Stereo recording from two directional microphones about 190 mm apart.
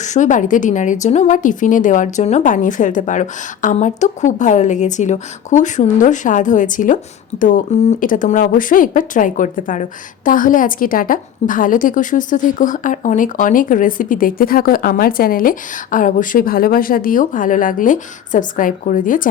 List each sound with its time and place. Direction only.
0.0 s a woman's voice: 40° left (ahead or behind)